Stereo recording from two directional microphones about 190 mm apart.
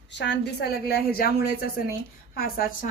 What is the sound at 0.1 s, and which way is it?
A woman's voice, 65° left (ahead or behind).